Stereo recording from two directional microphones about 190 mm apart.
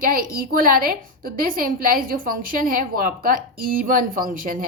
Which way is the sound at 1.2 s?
50° right (ahead or behind).